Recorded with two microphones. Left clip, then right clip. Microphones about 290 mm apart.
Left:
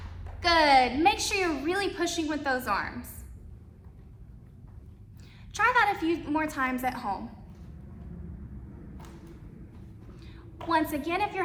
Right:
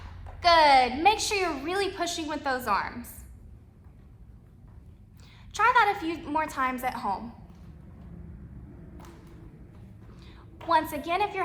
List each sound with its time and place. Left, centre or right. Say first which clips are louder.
0.3 s a woman's voice: right 2 dB; right
5.5 s a woman's voice: right 2 dB; right
10.2 s a woman's voice: left 4 dB; right